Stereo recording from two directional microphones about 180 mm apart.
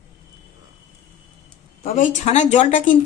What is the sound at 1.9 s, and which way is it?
Speech, 45° left (ahead or behind).